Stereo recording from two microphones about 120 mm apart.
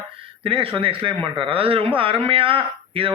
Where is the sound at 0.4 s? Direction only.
50° right (ahead or behind).